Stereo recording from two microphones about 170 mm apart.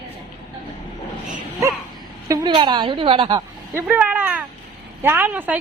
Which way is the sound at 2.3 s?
25° right (ahead or behind).